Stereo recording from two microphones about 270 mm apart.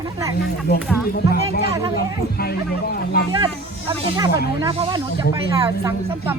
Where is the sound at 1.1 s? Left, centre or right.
Left.